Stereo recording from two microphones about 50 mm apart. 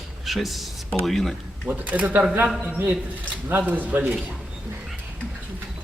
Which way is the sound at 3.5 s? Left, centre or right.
Right.